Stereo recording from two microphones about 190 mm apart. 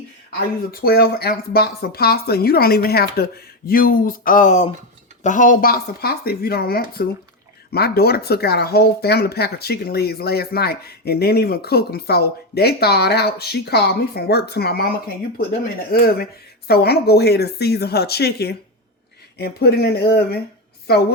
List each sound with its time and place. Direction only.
0.3 s speech: 50° left (ahead or behind)